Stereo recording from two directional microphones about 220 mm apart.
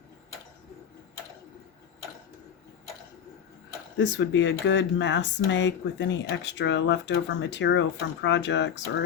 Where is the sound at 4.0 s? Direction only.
55° left (ahead or behind).